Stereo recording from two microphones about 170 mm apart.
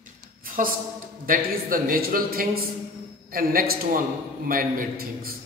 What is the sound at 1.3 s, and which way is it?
A man's voice, 55° right (ahead or behind).